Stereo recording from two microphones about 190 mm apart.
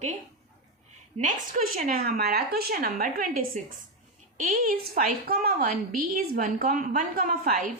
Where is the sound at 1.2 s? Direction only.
40° right (ahead or behind).